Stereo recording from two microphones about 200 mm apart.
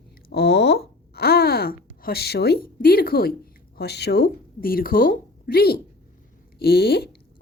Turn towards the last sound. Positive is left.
turn(degrees=50)  # may be behind; listen again after turning